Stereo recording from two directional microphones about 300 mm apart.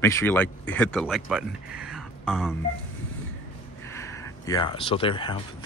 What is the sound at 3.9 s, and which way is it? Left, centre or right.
Speech, centre.